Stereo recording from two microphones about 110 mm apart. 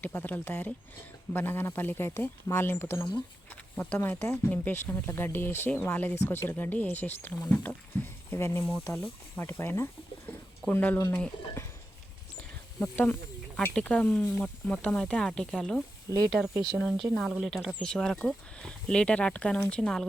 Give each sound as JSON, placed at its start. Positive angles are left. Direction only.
{"t": 0.0, "sound": "speech", "side_deg": 15}
{"t": 13.6, "sound": "speech", "side_deg": 10}